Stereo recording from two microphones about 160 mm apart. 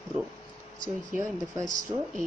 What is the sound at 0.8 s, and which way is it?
Speech, 20° right (ahead or behind).